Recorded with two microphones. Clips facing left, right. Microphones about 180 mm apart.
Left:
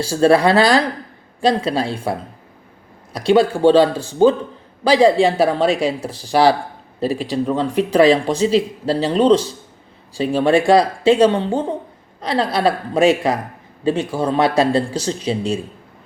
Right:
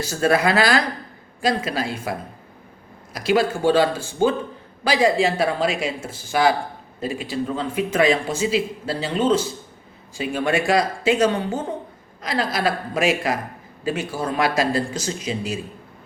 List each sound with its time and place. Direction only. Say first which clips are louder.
0.0 s speech: left 6 dB; 30° left (ahead or behind)